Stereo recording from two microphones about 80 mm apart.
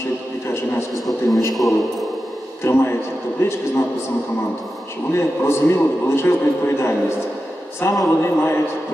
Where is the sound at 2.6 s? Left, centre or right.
Left.